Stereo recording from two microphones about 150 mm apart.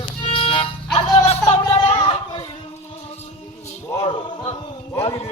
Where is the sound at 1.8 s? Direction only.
40° left (ahead or behind).